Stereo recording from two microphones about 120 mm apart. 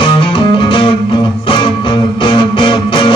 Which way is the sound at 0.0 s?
45° left (ahead or behind).